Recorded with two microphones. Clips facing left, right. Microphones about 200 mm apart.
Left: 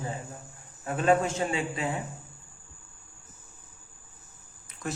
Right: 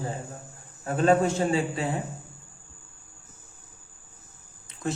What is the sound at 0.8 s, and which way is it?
Speech, 35° right (ahead or behind).